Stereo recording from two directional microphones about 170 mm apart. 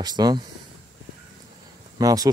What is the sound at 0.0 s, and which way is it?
Speech, 25° right (ahead or behind).